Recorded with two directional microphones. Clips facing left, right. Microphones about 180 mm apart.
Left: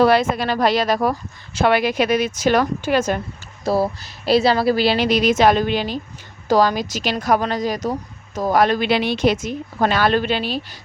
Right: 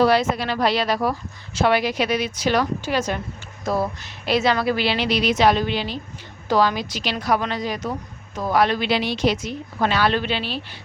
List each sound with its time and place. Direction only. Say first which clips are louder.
0.0 s speech: left 3 dB; 55° left (ahead or behind)
3.6 s speech: left 4 dB; 30° left (ahead or behind)